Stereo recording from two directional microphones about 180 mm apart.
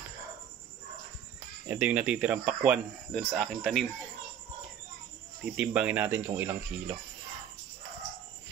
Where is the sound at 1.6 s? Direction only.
10° right (ahead or behind).